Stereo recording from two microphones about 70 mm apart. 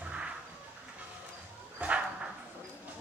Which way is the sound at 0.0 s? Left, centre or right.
Centre.